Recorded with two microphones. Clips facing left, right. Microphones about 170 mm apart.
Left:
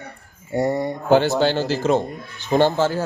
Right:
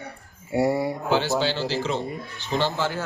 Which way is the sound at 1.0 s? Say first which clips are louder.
Left 9 dB; 50° left (ahead or behind).